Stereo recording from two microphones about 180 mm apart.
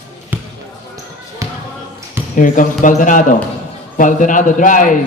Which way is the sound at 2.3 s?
50° left (ahead or behind).